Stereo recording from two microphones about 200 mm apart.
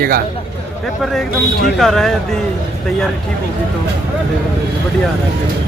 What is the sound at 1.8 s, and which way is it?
Speech, centre (ahead or behind).